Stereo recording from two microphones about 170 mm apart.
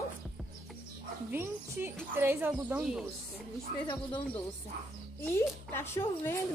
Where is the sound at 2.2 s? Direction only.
10° right (ahead or behind).